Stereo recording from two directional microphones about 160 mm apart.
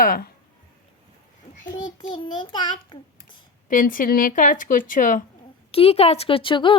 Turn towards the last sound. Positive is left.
turn(degrees=30)  # may be behind; listen again after turning